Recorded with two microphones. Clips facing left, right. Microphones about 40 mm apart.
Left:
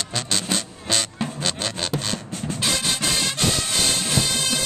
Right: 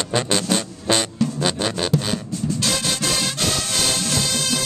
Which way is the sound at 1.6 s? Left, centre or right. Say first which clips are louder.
Right 5 dB; centre.